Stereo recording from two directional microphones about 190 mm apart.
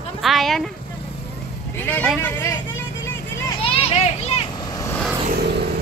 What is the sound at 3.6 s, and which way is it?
Children playing, 30° left (ahead or behind).